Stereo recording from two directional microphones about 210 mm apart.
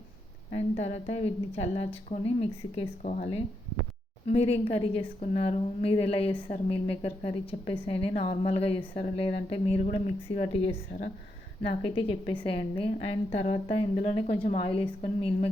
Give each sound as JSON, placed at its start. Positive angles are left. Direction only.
{"t": 0.8, "sound": "a woman's voice", "side_deg": 30}